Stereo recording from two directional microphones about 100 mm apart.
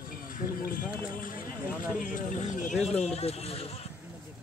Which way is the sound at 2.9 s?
90° left.